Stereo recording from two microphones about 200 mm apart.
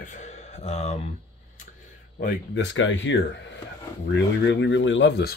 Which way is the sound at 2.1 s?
55° left (ahead or behind).